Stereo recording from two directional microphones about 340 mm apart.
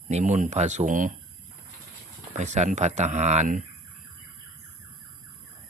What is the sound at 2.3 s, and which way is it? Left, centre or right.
Speech, right.